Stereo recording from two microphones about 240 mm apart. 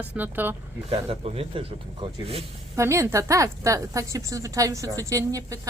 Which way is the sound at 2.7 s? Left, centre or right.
Centre.